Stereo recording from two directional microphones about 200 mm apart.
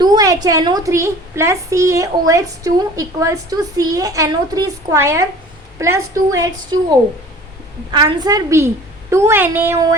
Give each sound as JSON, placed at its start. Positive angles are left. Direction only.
{"t": 0.0, "sound": "a woman's voice", "side_deg": -20}
{"t": 7.9, "sound": "a woman's voice", "side_deg": -20}